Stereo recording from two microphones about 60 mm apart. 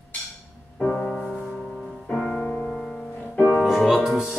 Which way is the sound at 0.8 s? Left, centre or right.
Centre.